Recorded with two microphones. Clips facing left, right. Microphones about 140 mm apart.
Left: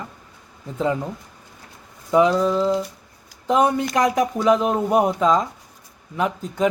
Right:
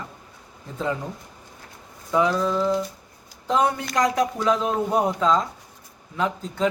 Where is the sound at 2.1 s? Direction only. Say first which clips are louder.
Left 4 dB; 20° left (ahead or behind).